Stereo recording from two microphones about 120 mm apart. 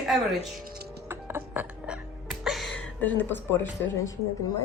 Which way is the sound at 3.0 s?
15° left (ahead or behind).